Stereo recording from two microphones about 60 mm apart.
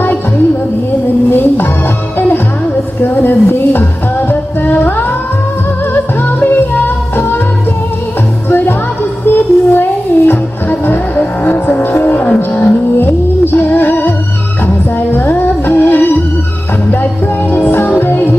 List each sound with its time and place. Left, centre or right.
1.3 s music: left
3.0 s speech: left
4.3 s music: left
8.5 s music: left
15.1 s music: left